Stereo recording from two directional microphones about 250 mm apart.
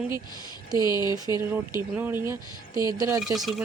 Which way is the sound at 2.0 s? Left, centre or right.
Centre.